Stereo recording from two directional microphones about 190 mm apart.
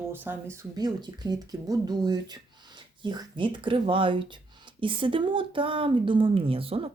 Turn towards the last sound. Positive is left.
turn(degrees=-30)  # may be behind; listen again after turning